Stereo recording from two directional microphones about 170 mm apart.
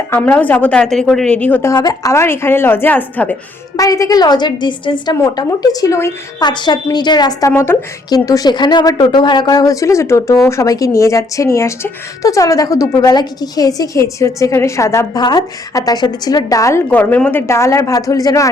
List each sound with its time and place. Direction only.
0.1 s a woman's voice: 10° left (ahead or behind)
1.7 s a woman's voice: 20° left (ahead or behind)
3.8 s a woman's voice: 20° left (ahead or behind)